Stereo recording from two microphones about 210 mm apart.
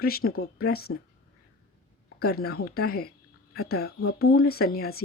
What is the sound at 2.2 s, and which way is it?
Speech, 50° left (ahead or behind).